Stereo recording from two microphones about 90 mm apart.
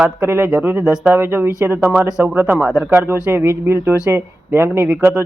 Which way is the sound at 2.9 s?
25° right (ahead or behind).